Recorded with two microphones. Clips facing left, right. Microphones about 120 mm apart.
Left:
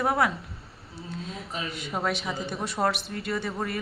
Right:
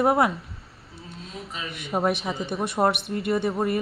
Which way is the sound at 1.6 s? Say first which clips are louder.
Right 6 dB; 25° right (ahead or behind).